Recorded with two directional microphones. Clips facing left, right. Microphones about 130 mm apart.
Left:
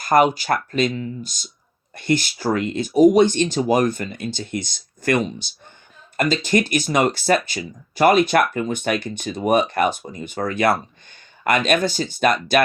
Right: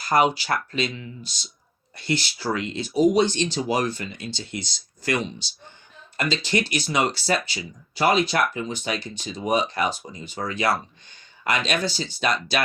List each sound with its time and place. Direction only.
0.0 s speech: 50° left (ahead or behind)